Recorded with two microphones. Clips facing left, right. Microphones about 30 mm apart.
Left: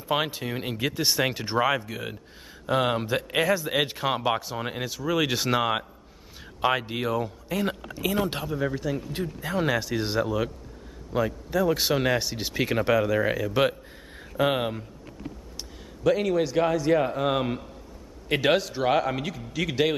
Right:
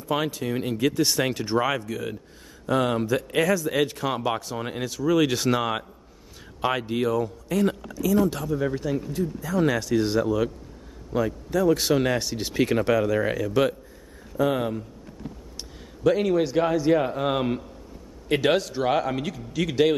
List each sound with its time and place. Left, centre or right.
0.0 s speech: left
7.9 s speech: left
8.5 s a man's voice: centre
9.1 s speech: left
9.6 s speech: centre
14.3 s a man's voice: left
14.6 s speech: left
16.0 s a man's voice: centre